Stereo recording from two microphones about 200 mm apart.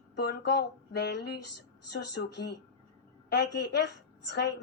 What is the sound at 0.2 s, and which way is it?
A woman's voice, 55° left (ahead or behind).